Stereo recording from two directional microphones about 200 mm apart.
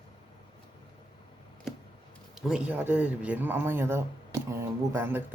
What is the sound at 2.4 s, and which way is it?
Speech, 5° right (ahead or behind).